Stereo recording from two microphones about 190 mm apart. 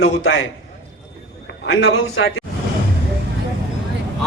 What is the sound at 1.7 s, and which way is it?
Speech, 90° left.